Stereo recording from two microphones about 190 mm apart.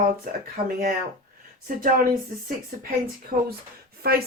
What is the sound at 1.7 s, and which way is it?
Speech, 50° right (ahead or behind).